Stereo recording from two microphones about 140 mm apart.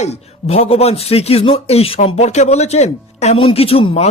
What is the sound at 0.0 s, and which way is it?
A man's voice, 50° left (ahead or behind).